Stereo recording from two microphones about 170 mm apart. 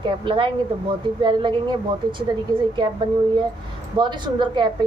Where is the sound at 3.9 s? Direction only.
25° right (ahead or behind).